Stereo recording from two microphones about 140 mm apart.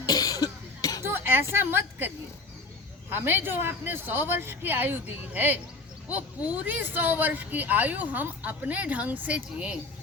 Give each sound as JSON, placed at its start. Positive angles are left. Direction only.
{"t": 0.0, "sound": "cough", "side_deg": 25}
{"t": 1.0, "sound": "a sound", "side_deg": -15}
{"t": 3.1, "sound": "speech", "side_deg": -15}